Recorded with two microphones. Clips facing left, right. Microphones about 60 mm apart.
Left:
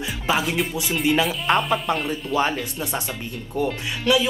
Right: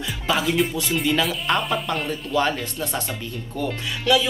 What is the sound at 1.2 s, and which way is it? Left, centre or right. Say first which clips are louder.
Speech: left 2 dB; centre.